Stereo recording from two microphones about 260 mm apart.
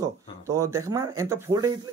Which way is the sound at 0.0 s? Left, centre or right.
Centre.